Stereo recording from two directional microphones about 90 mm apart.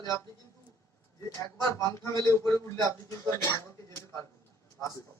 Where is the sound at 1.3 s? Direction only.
35° left (ahead or behind).